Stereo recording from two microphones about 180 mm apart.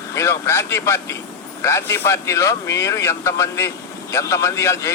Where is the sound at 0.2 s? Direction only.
15° left (ahead or behind).